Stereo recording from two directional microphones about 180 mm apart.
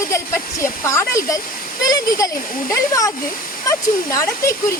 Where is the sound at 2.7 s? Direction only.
15° left (ahead or behind).